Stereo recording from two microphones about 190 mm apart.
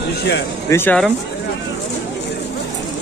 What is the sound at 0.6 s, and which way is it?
Speech, 10° left (ahead or behind).